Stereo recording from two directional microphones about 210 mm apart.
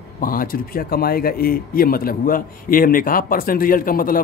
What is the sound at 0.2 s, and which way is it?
Speech, 40° left (ahead or behind).